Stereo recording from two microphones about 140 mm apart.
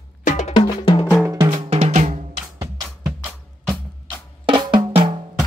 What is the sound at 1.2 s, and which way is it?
Drum, 25° right (ahead or behind).